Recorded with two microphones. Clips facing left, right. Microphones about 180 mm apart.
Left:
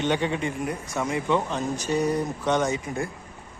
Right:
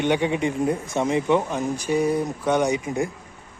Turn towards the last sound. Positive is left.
turn(degrees=-20)  # may be behind; listen again after turning